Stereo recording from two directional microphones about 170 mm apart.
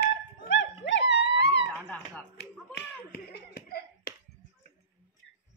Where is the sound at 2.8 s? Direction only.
70° left (ahead or behind).